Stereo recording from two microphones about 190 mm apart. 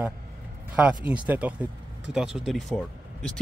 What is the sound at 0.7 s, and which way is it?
Speech, 5° right (ahead or behind).